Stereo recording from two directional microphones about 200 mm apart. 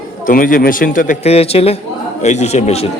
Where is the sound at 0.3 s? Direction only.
45° left (ahead or behind).